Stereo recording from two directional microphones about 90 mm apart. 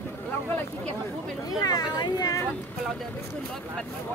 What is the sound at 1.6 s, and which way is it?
Speech, 50° left (ahead or behind).